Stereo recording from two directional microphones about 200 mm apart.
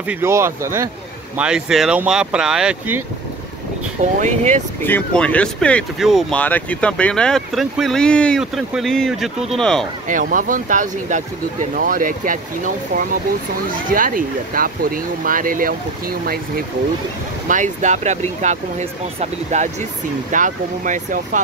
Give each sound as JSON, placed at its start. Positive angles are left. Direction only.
{"t": 0.0, "sound": "speech", "side_deg": -10}
{"t": 4.2, "sound": "speech", "side_deg": -35}
{"t": 4.8, "sound": "speech", "side_deg": 5}
{"t": 10.0, "sound": "speech", "side_deg": -40}